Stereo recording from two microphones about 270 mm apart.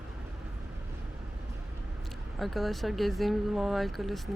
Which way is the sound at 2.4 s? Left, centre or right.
Centre.